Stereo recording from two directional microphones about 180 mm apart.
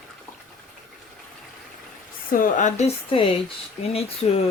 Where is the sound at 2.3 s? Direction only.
45° left (ahead or behind).